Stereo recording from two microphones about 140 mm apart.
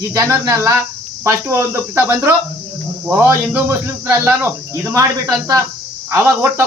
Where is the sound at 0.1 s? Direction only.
20° right (ahead or behind).